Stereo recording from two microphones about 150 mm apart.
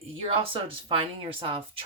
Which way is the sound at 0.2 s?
40° right (ahead or behind).